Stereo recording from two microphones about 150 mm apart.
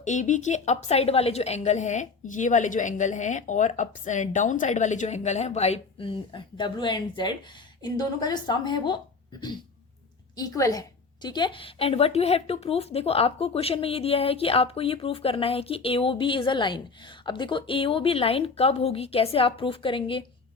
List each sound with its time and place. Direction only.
0.0 s a woman's voice: 55° left (ahead or behind); by 9.0 s 30° left (ahead or behind)
10.3 s a woman's voice: 25° left (ahead or behind)